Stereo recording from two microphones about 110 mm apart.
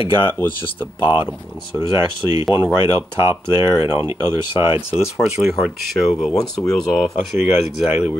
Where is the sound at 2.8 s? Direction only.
40° left (ahead or behind).